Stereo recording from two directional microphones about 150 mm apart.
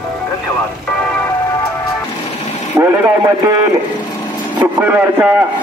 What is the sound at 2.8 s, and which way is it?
Speech, 15° right (ahead or behind).